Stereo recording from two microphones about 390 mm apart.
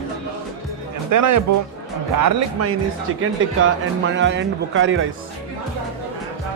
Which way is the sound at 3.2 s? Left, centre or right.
Right.